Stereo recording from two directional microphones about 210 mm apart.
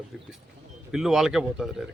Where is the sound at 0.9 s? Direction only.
Centre (ahead or behind).